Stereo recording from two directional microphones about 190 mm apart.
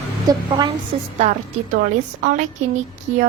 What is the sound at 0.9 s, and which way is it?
Speech, 35° right (ahead or behind).